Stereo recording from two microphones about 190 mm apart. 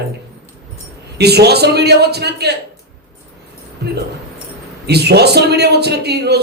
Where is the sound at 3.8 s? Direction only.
60° right (ahead or behind).